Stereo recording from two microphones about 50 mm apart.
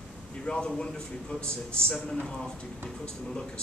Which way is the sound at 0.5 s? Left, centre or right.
Centre.